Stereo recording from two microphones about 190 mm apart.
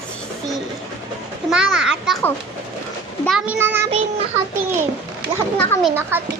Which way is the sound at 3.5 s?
10° right (ahead or behind).